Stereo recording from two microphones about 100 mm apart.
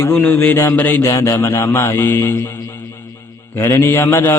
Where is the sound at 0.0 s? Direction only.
15° left (ahead or behind).